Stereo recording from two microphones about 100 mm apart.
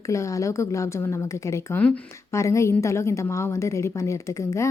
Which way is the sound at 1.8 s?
15° left (ahead or behind).